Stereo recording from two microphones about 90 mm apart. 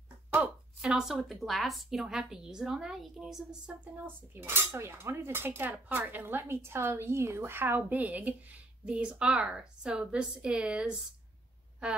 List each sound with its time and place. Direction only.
0.7 s a woman's voice: 5° right (ahead or behind)
3.8 s dishes: 20° right (ahead or behind)